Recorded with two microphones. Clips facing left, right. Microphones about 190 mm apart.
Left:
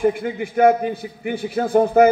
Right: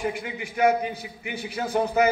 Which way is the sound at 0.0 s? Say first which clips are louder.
Left 10 dB; 50° left (ahead or behind).